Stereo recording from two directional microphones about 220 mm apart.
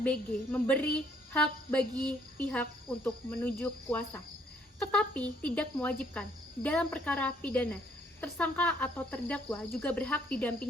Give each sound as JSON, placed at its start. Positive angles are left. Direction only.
{"t": 0.0, "sound": "a woman's voice", "side_deg": 5}